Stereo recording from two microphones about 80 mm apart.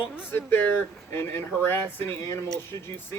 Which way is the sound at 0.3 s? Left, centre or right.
Left.